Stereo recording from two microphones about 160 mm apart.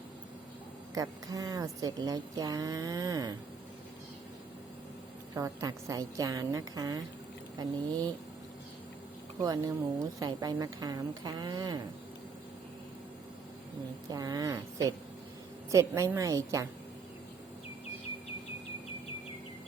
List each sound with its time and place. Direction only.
0.9 s speech: 25° right (ahead or behind)
5.3 s speech: 20° right (ahead or behind)
9.4 s speech: 25° right (ahead or behind)
14.1 s speech: 25° right (ahead or behind)